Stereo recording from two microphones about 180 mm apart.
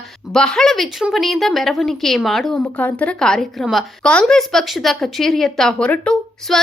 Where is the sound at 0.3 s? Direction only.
5° left (ahead or behind).